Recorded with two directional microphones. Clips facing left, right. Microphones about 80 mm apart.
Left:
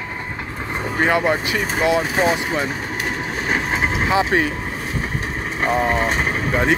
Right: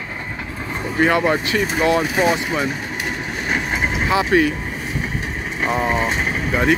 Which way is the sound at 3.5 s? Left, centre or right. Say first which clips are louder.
Left 1 dB; left.